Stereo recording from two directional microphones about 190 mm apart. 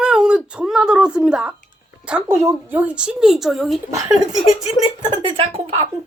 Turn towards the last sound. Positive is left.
turn(degrees=-30)  # may be behind; listen again after turning